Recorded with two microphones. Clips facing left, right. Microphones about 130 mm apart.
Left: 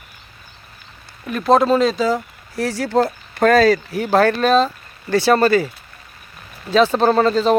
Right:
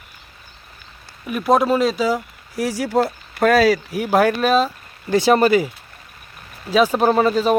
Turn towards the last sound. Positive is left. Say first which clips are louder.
# left 1 dB
turn(degrees=-10)  # may be behind; listen again after turning